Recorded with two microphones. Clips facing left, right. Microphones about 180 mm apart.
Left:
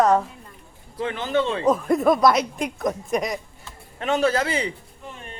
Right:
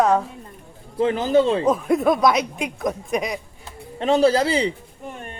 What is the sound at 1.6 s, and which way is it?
Speech, centre (ahead or behind).